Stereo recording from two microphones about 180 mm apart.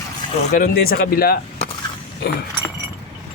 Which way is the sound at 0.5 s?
55° left (ahead or behind).